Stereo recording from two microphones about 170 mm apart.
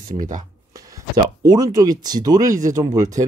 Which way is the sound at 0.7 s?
20° right (ahead or behind).